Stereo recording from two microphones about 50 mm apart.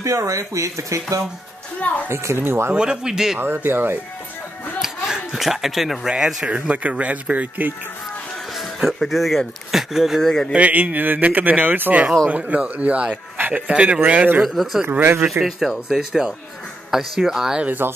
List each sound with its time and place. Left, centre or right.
0.0 s speech: right
2.0 s speech: right
2.7 s speech: centre
3.3 s speech: right
4.8 s a sound: centre
6.0 s speech: centre; by 7.7 s right
8.8 s speech: centre
10.2 s a sound: centre
10.5 s a man's voice: right
14.4 s speech: centre
14.9 s speech: right
15.2 s speech: centre
17.6 s speech: right